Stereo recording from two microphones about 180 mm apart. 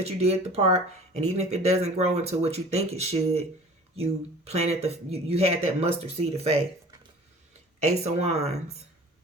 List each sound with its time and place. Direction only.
0.2 s speech: 35° right (ahead or behind)
7.9 s speech: 35° right (ahead or behind)